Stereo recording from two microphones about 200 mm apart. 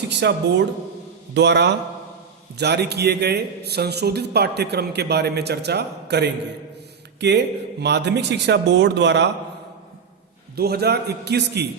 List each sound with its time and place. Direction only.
0.1 s a man's voice: 60° right (ahead or behind)
10.5 s a man's voice: 50° right (ahead or behind)